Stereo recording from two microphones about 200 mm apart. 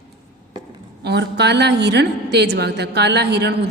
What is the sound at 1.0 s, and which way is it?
A woman's voice, 55° right (ahead or behind).